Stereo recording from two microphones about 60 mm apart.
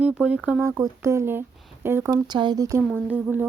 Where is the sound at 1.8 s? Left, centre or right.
Right.